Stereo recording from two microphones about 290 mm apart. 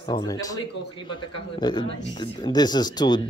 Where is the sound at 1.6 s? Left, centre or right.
Centre.